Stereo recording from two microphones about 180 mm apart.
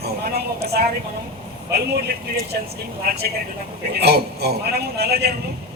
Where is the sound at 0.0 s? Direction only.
60° right (ahead or behind).